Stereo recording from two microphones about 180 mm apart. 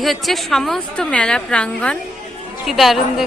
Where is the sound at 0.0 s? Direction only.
Centre (ahead or behind).